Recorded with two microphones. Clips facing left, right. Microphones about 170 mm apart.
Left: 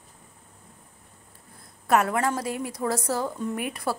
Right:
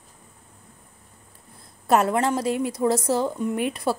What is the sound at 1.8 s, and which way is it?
A woman's voice, 30° right (ahead or behind).